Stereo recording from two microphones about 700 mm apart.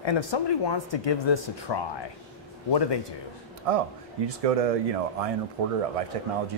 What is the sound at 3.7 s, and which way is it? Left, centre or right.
Speech, right.